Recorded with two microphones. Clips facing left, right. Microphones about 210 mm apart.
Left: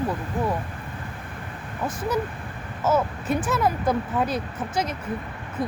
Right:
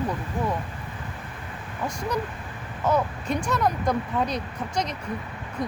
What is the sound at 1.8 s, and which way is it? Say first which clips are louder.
Speech: left 2 dB; 5° left (ahead or behind).